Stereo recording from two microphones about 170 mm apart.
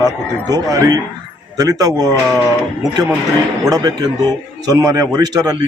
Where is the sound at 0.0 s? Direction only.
20° right (ahead or behind).